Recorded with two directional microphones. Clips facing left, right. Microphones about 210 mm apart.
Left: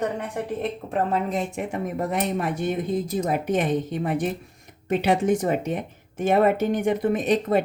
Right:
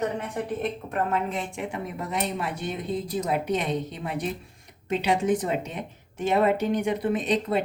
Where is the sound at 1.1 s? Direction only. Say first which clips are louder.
Left 3 dB; 40° left (ahead or behind).